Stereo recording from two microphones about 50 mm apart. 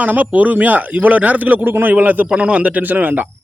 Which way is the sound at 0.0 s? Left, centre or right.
Right.